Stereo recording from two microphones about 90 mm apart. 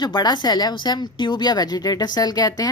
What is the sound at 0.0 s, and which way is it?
Speech, 50° left (ahead or behind).